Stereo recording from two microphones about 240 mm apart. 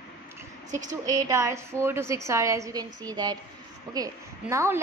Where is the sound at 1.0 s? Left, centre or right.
Centre.